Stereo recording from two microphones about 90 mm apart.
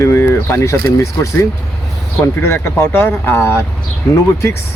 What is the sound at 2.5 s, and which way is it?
Speech, 30° left (ahead or behind).